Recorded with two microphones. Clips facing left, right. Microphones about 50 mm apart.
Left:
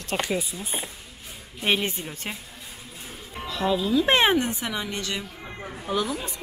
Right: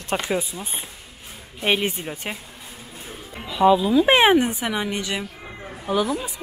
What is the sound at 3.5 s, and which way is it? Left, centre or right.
Speech, centre.